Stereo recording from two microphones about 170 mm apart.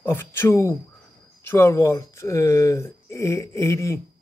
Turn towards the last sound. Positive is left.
turn(degrees=15)  # may be behind; listen again after turning